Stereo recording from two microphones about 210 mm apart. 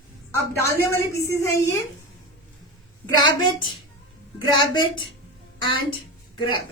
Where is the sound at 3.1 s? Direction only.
20° left (ahead or behind).